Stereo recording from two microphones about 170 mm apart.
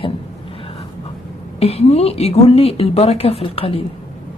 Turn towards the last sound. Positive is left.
turn(degrees=35)  # may be behind; listen again after turning